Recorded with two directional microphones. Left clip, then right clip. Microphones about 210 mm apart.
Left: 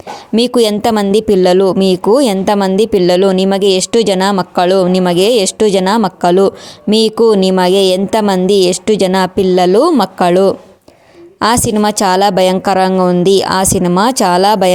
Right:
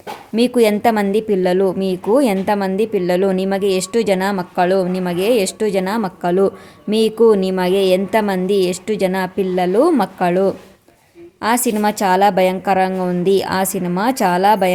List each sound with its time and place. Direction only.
0.3 s speech: 35° left (ahead or behind)